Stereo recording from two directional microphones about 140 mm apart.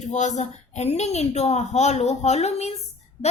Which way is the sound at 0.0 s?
55° left (ahead or behind).